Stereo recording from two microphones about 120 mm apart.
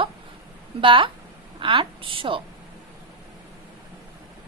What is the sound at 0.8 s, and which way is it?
A woman's voice, 45° right (ahead or behind).